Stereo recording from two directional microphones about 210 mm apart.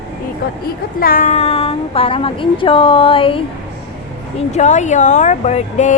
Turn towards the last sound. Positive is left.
turn(degrees=35)  # may be behind; listen again after turning